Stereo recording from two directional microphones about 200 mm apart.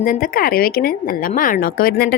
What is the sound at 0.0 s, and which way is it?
Speech, 45° left (ahead or behind).